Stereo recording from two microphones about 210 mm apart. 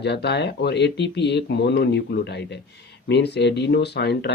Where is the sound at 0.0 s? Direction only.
55° left (ahead or behind).